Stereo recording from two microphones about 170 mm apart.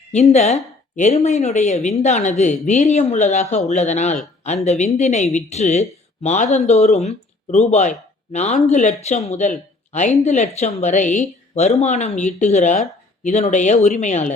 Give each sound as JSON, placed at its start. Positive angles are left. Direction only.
{"t": 0.1, "sound": "speech", "side_deg": 40}